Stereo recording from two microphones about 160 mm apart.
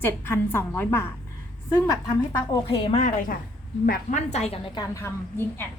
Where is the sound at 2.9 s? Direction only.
50° left (ahead or behind).